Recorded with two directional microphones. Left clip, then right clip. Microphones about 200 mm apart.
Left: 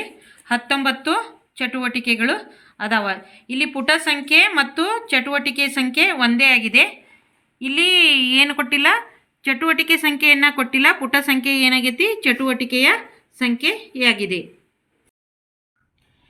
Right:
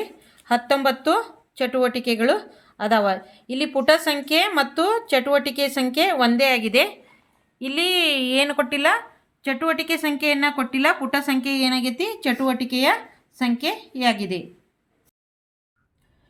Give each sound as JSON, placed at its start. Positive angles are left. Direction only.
{"t": 0.0, "sound": "a woman's voice", "side_deg": -55}